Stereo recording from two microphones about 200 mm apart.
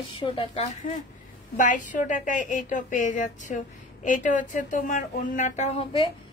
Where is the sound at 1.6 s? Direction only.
40° left (ahead or behind).